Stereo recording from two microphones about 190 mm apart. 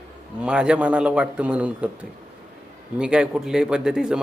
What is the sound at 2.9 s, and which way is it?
A man's voice, 5° right (ahead or behind).